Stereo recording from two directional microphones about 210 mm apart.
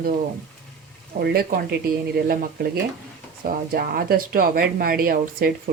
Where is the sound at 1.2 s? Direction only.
45° right (ahead or behind).